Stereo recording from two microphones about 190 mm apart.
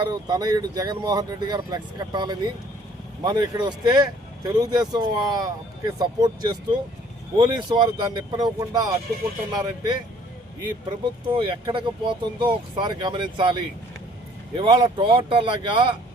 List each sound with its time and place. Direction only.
0.0 s speech: 20° right (ahead or behind)